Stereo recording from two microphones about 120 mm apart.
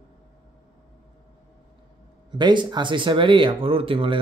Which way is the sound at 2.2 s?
40° right (ahead or behind).